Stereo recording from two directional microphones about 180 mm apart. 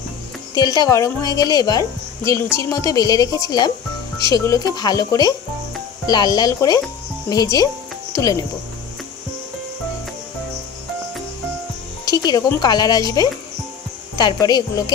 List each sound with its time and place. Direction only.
0.6 s a woman's voice: 20° left (ahead or behind)
12.0 s a woman's voice: 20° left (ahead or behind)